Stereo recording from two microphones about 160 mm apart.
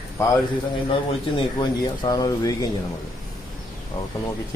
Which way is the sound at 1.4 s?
25° left (ahead or behind).